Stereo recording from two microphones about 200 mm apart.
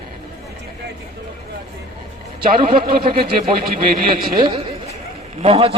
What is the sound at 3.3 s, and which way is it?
Speech, 40° right (ahead or behind).